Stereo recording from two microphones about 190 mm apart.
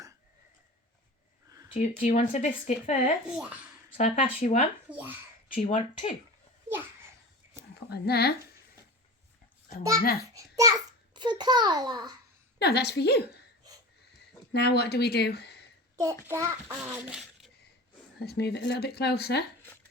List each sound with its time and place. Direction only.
1.7 s speech: 40° left (ahead or behind)
3.2 s speech: 5° right (ahead or behind)
3.9 s speech: 40° left (ahead or behind)
4.9 s a child's voice: 10° right (ahead or behind)
5.5 s speech: 30° left (ahead or behind)
7.9 s speech: 55° left (ahead or behind)
10.3 s a child's voice: 20° right (ahead or behind)
12.5 s speech: 60° left (ahead or behind)
14.5 s speech: 60° left (ahead or behind)
16.0 s a child's voice: 15° right (ahead or behind)
18.2 s speech: 60° left (ahead or behind)